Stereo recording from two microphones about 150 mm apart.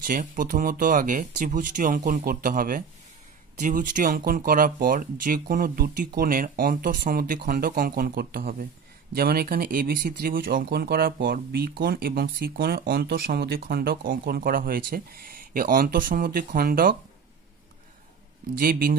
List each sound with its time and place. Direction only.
0.0 s speech: 65° right (ahead or behind)
18.6 s speech: 75° right (ahead or behind)